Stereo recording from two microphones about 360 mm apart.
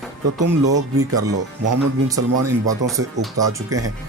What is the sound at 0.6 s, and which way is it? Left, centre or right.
Speech, right.